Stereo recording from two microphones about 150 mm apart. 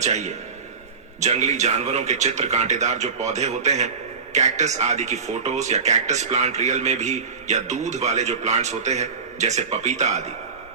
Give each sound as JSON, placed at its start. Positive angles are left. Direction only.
{"t": 0.0, "sound": "speech", "side_deg": -50}